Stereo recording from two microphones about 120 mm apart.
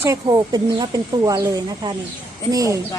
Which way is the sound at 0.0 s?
30° right (ahead or behind).